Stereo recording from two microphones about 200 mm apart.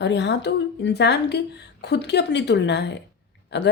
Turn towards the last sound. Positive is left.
turn(degrees=55)  # may be behind; listen again after turning